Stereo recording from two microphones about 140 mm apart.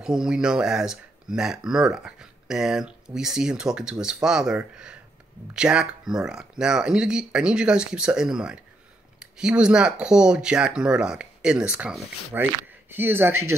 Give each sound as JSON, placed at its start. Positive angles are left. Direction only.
{"t": 0.0, "sound": "speech", "side_deg": -5}